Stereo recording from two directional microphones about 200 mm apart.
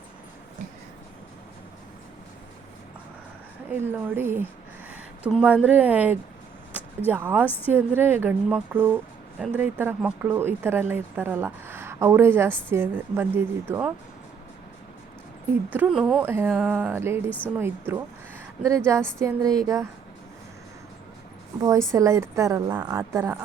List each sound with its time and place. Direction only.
3.7 s speech: 10° right (ahead or behind)
7.4 s a woman's voice: 10° left (ahead or behind)
7.7 s speech: 10° right (ahead or behind)
15.7 s speech: 5° right (ahead or behind)
17.2 s a woman's voice: 10° left (ahead or behind)
17.6 s speech: 10° right (ahead or behind)
19.2 s speech: 15° right (ahead or behind)
21.6 s speech: 15° right (ahead or behind)